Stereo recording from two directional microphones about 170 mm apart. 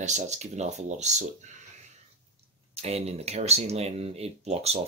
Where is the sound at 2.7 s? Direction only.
40° right (ahead or behind).